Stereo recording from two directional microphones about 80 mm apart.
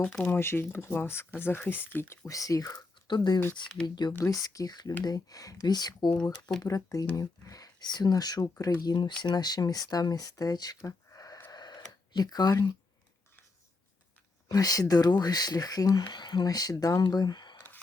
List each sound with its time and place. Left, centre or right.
0.3 s speech: left
2.2 s speech: left
3.1 s speech: left
4.2 s speech: left
6.6 s speech: left
10.8 s a sound: left
11.5 s radio: left
12.1 s speech: left
14.4 s speech: left
16.0 s speech: left